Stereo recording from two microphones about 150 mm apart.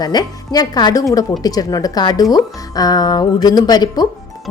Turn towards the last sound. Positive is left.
turn(degrees=25)  # may be behind; listen again after turning